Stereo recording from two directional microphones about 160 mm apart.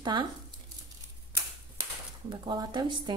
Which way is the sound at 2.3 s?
30° right (ahead or behind).